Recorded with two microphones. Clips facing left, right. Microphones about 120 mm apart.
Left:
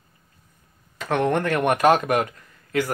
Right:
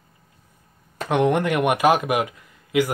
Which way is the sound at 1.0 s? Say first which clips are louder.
Right 2 dB; 15° right (ahead or behind).